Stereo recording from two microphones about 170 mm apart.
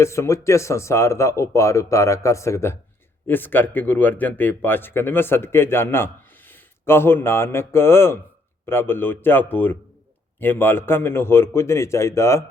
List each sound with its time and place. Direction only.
0.0 s speech: 15° left (ahead or behind)